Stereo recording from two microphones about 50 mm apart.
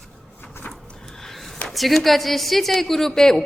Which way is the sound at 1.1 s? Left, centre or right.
Centre.